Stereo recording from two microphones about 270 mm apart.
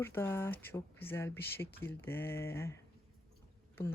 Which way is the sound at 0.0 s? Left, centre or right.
Centre.